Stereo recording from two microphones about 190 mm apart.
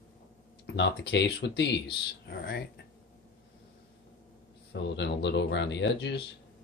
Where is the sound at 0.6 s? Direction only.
65° left (ahead or behind).